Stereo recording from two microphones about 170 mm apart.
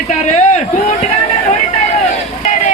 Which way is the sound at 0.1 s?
45° left (ahead or behind).